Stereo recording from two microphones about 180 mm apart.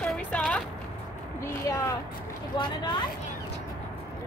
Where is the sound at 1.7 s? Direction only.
20° left (ahead or behind).